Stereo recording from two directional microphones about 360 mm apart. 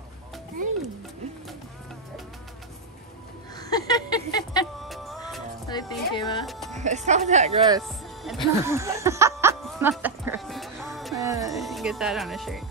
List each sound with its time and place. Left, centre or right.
3.5 s a sound: centre
4.7 s music: centre
5.7 s speech: centre
6.4 s speech: centre
6.8 s speech: centre
7.8 s music: centre